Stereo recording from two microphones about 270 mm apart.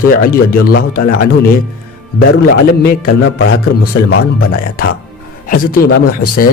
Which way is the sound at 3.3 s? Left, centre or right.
Left.